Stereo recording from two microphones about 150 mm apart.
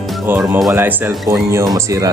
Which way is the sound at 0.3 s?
15° right (ahead or behind).